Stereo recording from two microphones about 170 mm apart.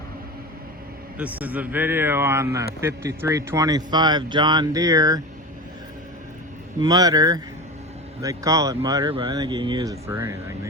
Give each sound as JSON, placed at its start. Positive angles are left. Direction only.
{"t": 1.2, "sound": "a man's voice", "side_deg": -10}
{"t": 6.7, "sound": "speech", "side_deg": -20}